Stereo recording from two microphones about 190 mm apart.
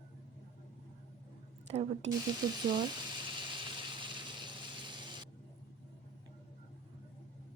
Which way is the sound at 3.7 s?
25° right (ahead or behind).